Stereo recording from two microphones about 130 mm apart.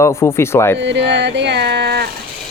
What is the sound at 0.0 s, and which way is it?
Speech, 20° left (ahead or behind).